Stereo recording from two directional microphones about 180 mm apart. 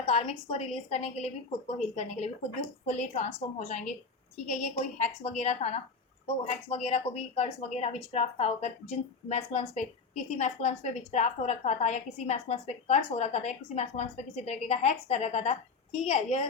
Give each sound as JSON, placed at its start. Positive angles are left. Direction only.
{"t": 0.0, "sound": "a woman's voice", "side_deg": 35}